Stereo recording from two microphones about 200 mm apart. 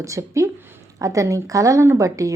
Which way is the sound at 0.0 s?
15° right (ahead or behind).